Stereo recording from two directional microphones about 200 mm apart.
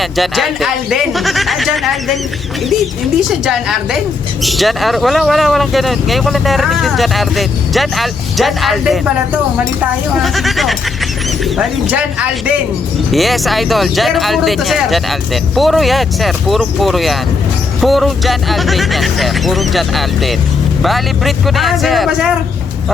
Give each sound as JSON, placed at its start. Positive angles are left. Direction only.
{"t": 0.0, "sound": "speech", "side_deg": 0}
{"t": 3.2, "sound": "speech", "side_deg": -5}